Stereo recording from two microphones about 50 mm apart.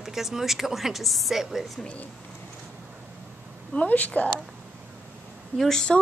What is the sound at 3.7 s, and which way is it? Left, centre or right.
Speech, left.